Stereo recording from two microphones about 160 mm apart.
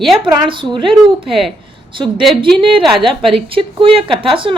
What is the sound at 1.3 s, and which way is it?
Speech, centre (ahead or behind).